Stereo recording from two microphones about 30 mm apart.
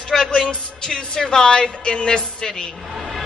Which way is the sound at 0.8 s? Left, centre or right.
Left.